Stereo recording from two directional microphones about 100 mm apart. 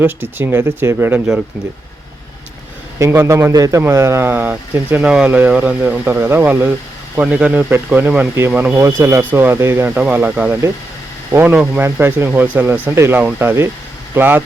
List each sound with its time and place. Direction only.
0.0 s speech: 20° right (ahead or behind)
1.3 s speech: 5° right (ahead or behind)
3.0 s speech: 30° right (ahead or behind)